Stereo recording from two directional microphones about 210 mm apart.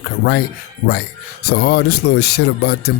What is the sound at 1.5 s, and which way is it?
Speech, 50° left (ahead or behind).